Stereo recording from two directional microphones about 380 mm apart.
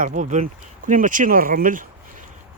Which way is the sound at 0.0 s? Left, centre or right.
Centre.